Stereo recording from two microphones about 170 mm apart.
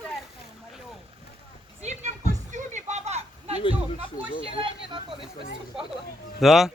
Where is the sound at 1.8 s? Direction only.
40° right (ahead or behind).